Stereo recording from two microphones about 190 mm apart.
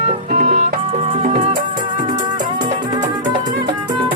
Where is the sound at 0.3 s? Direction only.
40° right (ahead or behind).